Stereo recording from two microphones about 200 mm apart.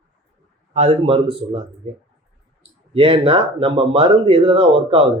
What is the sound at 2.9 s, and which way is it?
Speech, 25° right (ahead or behind).